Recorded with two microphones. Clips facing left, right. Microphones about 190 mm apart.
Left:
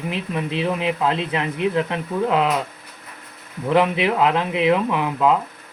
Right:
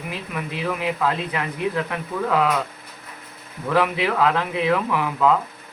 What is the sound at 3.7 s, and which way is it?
Speech, 20° left (ahead or behind).